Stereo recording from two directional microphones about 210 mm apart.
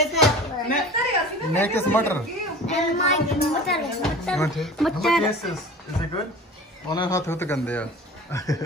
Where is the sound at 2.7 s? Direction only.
35° left (ahead or behind).